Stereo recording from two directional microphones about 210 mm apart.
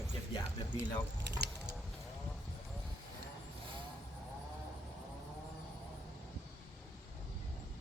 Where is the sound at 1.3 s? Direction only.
55° right (ahead or behind).